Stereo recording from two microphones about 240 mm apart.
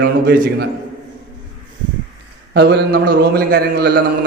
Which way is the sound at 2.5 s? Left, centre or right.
Right.